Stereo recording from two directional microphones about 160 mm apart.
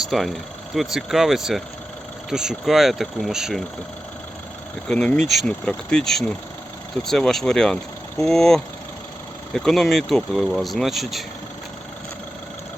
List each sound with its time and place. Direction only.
0.1 s speech: centre (ahead or behind)
4.9 s speech: 5° left (ahead or behind)